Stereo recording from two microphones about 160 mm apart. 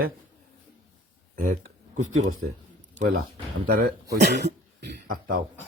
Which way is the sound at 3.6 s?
65° right (ahead or behind).